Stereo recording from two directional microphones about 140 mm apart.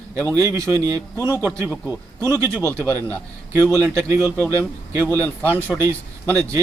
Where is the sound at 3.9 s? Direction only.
20° right (ahead or behind).